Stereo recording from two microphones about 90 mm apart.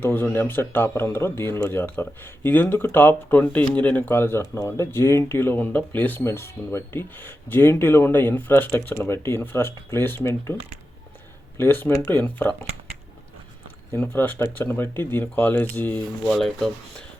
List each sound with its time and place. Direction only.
0.0 s speech: 20° left (ahead or behind)
13.9 s speech: 25° left (ahead or behind)
16.2 s speech: 5° left (ahead or behind)